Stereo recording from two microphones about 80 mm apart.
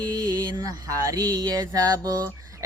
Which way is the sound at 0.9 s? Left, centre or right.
Right.